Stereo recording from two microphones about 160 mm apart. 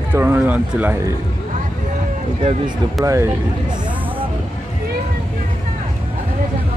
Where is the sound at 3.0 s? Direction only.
20° right (ahead or behind).